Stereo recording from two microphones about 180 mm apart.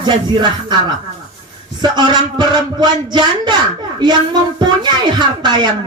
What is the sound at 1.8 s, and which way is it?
A woman's voice, 25° right (ahead or behind).